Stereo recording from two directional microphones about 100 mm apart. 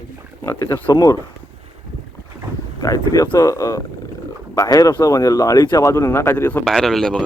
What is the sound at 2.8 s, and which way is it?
Speech, 35° left (ahead or behind).